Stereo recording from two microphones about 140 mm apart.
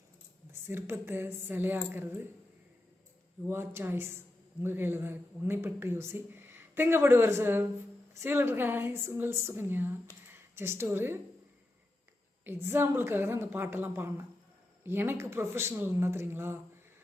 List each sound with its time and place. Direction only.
0.7 s speech: 15° right (ahead or behind)
3.4 s speech: 20° right (ahead or behind)
12.5 s speech: 15° right (ahead or behind)